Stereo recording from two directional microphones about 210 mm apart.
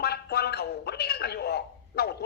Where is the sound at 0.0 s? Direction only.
50° left (ahead or behind).